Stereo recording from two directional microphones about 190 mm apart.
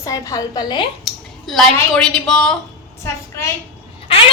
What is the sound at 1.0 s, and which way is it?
A woman's voice, centre (ahead or behind).